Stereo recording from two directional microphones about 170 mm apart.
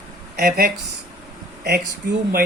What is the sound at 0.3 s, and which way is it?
Speech, 65° right (ahead or behind).